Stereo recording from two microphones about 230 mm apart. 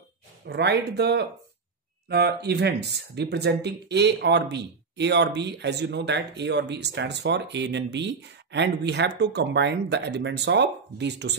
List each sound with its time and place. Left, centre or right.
0.5 s speech: right